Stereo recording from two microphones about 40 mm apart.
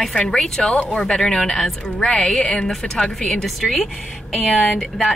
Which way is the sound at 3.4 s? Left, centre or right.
Centre.